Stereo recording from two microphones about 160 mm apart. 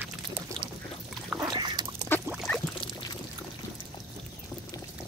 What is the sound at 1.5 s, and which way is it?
Duck, 25° right (ahead or behind).